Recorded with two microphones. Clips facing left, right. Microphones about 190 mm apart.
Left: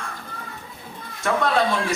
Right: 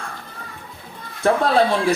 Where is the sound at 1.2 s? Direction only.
35° right (ahead or behind).